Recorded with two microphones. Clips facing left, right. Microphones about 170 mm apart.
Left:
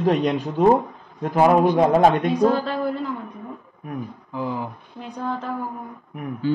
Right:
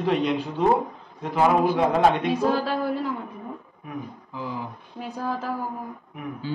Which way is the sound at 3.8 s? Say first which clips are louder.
Left 5 dB; 55° left (ahead or behind).